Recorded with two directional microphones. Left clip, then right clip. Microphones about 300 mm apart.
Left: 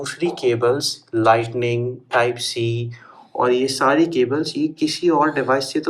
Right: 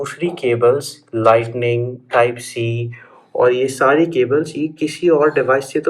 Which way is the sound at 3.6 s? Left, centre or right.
Left.